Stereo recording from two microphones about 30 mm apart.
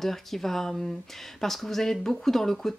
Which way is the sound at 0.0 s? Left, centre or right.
Centre.